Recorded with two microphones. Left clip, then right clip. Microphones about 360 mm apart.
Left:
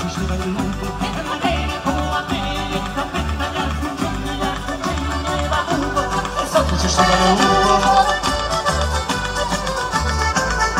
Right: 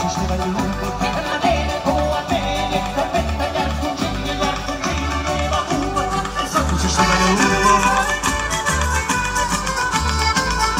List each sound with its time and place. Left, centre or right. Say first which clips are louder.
7.0 s music: left 2 dB; left
9.9 s music: left 1 dB; centre